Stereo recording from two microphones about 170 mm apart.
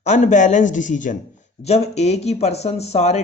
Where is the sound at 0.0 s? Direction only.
45° left (ahead or behind).